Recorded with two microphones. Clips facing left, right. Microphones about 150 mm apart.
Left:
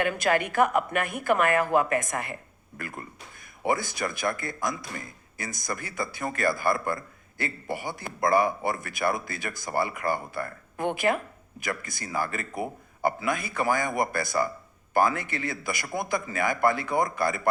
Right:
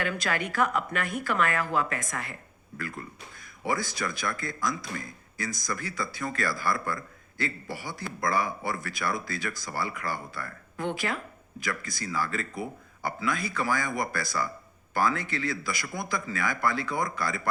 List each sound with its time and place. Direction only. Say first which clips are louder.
0.0 s speech: left 5 dB; 50° left (ahead or behind)